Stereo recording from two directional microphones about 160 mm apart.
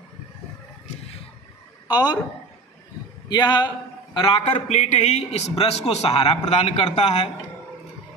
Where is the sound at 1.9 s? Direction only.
25° left (ahead or behind).